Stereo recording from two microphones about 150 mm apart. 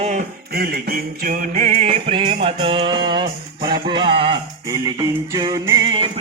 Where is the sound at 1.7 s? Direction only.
45° right (ahead or behind).